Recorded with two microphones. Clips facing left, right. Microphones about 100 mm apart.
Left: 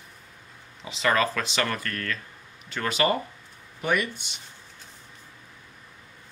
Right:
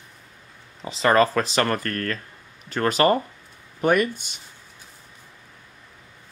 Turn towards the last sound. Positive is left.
turn(degrees=-45)  # may be behind; listen again after turning